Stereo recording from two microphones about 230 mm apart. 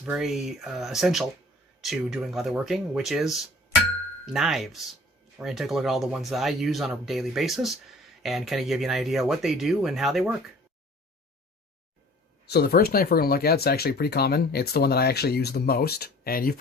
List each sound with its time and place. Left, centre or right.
0.0 s speech: centre
12.5 s speech: left